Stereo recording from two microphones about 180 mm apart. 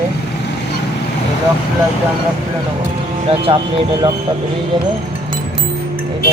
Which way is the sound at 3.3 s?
30° right (ahead or behind).